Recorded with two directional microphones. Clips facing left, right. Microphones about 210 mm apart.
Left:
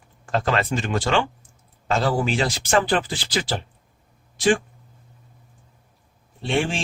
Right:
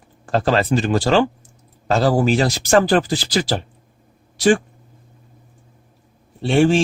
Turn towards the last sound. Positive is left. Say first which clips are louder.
# right 9 dB
turn(degrees=-40)  # may be behind; listen again after turning